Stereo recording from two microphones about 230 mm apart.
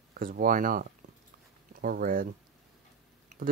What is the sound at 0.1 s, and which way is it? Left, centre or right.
Speech, right.